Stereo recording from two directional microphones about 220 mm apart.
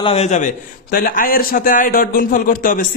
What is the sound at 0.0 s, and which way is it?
A man's voice, 30° left (ahead or behind).